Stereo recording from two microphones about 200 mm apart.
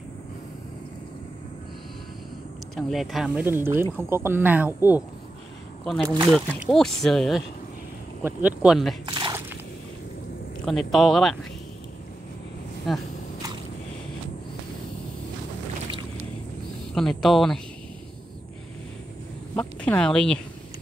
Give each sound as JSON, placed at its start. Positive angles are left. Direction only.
{"t": 2.7, "sound": "speech", "side_deg": 0}
{"t": 6.2, "sound": "speech", "side_deg": 0}
{"t": 8.2, "sound": "speech", "side_deg": -10}
{"t": 9.0, "sound": "squish", "side_deg": -20}
{"t": 10.6, "sound": "speech", "side_deg": 0}
{"t": 12.9, "sound": "speech", "side_deg": 0}
{"t": 16.9, "sound": "speech", "side_deg": 0}
{"t": 19.5, "sound": "a sound", "side_deg": 10}